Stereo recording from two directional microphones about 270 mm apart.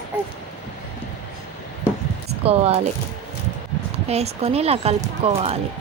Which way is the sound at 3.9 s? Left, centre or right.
Right.